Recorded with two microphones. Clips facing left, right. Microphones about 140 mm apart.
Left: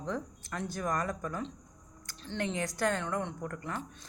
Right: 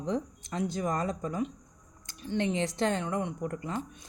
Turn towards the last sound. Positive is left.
turn(degrees=-20)  # may be behind; listen again after turning